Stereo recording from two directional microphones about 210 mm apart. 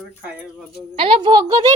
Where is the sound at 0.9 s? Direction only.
25° right (ahead or behind).